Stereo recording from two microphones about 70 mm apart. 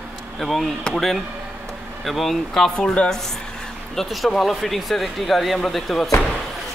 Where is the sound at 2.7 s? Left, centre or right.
Centre.